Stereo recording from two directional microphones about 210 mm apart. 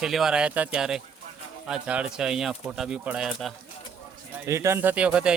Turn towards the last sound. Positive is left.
turn(degrees=-5)  # may be behind; listen again after turning